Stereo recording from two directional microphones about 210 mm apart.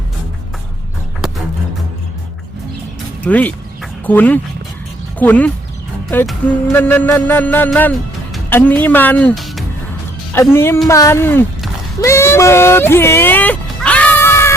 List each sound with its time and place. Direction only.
3.2 s music: 5° left (ahead or behind)
10.3 s music: 10° left (ahead or behind)
11.9 s a sound: 15° left (ahead or behind)